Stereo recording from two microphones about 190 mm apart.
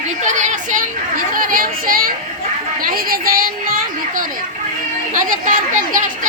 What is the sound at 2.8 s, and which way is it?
Child singing, 50° right (ahead or behind).